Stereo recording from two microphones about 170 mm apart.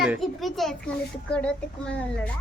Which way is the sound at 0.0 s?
Centre (ahead or behind).